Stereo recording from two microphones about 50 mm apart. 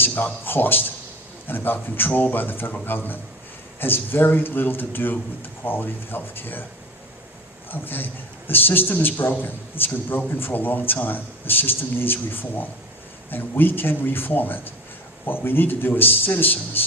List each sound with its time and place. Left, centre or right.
0.0 s a man's voice: left
7.7 s a man's voice: left